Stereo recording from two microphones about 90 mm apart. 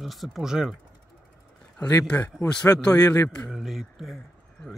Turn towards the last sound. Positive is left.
turn(degrees=-5)  # may be behind; listen again after turning